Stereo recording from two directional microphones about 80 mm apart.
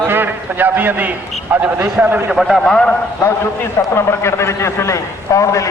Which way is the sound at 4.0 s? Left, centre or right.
Left.